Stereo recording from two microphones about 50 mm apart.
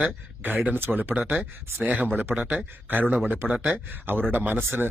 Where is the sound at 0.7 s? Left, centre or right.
Right.